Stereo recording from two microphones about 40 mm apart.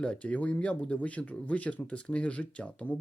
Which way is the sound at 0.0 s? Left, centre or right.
Left.